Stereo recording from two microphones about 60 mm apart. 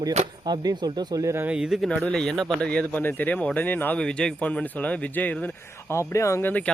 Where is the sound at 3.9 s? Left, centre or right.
Centre.